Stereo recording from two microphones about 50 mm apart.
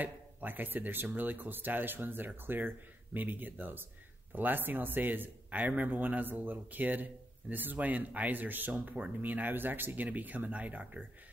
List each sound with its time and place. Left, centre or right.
0.0 s speech: right